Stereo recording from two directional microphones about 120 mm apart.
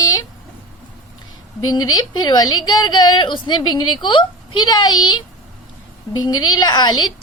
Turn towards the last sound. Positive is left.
turn(degrees=35)  # may be behind; listen again after turning